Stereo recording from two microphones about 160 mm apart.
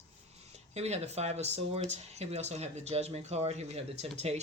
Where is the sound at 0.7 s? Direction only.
45° right (ahead or behind).